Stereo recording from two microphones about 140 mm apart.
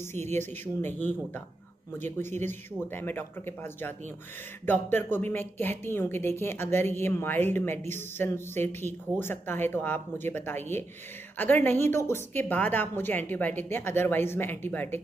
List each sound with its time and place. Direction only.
0.1 s a woman's voice: 15° left (ahead or behind)